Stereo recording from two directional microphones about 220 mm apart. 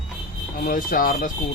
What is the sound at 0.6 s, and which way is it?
Speech, 40° left (ahead or behind).